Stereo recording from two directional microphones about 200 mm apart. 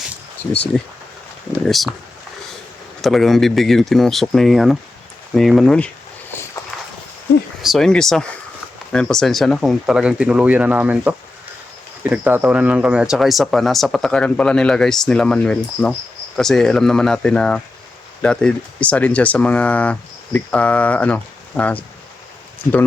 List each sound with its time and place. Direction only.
0.7 s speech: 5° left (ahead or behind)
3.0 s speech: centre (ahead or behind)
7.6 s speech: centre (ahead or behind)